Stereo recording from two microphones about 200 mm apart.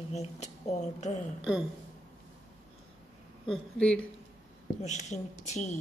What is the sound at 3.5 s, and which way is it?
Speech, 5° left (ahead or behind).